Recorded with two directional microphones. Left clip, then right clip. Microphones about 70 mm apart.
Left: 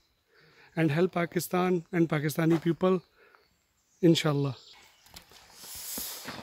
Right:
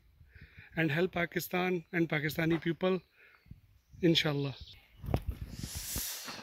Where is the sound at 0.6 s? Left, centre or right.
Centre.